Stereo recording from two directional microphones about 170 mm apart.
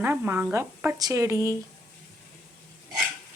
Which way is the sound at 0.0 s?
10° right (ahead or behind).